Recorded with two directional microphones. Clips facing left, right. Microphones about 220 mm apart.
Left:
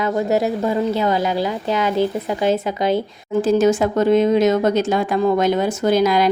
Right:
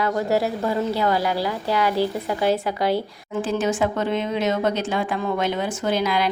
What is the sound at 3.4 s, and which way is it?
Speech, 40° left (ahead or behind).